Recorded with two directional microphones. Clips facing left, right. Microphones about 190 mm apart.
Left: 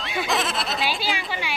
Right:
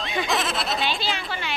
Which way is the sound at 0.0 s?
5° left (ahead or behind).